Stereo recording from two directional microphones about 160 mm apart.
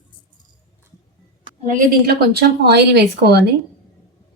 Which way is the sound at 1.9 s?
90° right.